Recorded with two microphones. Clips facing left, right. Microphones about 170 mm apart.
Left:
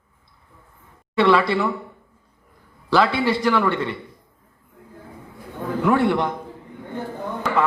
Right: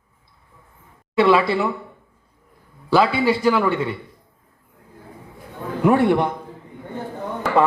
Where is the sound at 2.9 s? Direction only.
10° right (ahead or behind).